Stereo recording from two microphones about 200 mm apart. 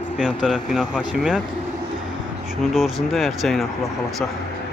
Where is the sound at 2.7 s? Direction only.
Centre (ahead or behind).